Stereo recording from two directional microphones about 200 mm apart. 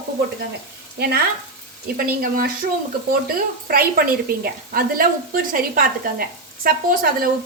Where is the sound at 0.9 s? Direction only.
50° right (ahead or behind).